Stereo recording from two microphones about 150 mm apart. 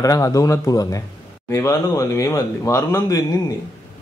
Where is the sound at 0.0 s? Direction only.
20° left (ahead or behind).